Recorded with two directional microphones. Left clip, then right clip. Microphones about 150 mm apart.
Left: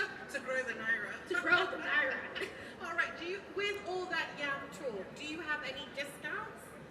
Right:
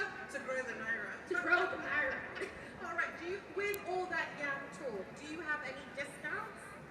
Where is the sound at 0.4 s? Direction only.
20° left (ahead or behind).